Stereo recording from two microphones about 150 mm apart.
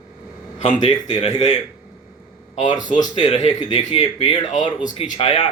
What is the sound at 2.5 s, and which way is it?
Speech, 55° left (ahead or behind).